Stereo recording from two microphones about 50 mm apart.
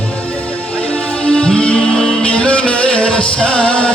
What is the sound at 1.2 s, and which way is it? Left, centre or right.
Music, left.